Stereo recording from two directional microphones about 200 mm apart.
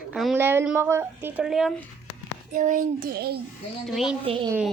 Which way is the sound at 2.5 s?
40° right (ahead or behind).